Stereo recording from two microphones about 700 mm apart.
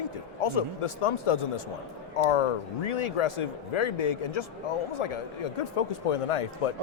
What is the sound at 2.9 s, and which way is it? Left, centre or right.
Speech, left.